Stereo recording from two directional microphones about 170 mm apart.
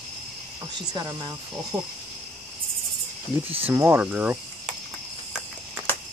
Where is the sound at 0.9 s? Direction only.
25° right (ahead or behind).